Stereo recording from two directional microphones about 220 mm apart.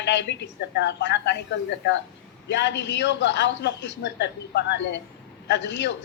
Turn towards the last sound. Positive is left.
turn(degrees=55)  # may be behind; listen again after turning